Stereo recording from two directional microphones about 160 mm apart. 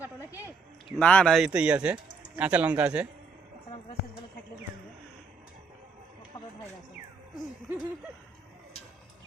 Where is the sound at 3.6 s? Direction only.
35° left (ahead or behind).